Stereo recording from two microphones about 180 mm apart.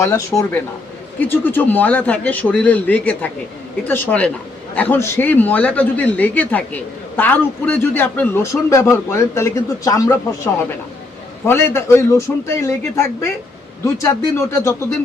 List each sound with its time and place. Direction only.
0.0 s speech: 15° left (ahead or behind)